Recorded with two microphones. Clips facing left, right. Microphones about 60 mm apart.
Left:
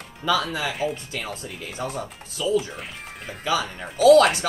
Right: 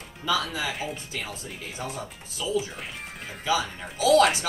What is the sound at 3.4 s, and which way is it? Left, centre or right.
Speech, left.